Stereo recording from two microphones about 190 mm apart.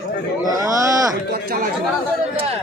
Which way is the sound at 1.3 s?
50° right (ahead or behind).